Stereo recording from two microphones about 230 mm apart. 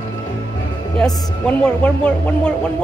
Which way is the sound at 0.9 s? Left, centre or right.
Centre.